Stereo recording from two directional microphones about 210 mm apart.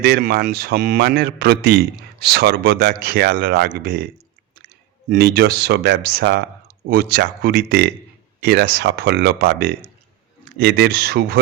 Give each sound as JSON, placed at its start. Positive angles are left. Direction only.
{"t": 0.0, "sound": "a man's voice", "side_deg": -45}